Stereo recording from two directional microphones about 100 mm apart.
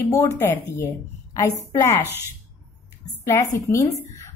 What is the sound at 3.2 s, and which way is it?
Speech, 30° left (ahead or behind).